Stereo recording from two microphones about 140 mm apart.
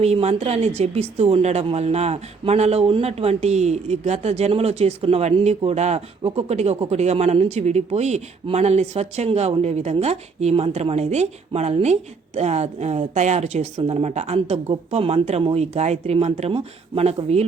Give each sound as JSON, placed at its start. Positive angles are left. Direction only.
{"t": 0.0, "sound": "speech", "side_deg": -50}